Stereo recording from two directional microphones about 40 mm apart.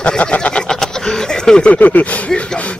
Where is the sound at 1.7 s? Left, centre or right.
Left.